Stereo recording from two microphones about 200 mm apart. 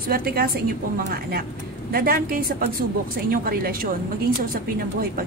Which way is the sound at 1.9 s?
50° right (ahead or behind).